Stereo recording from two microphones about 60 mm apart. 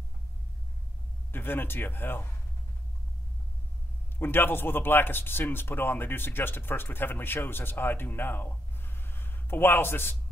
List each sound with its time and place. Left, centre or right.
1.3 s a man's voice: left
4.2 s a man's voice: left